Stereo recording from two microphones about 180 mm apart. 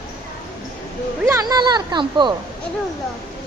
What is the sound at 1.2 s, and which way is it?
Speech, 20° right (ahead or behind).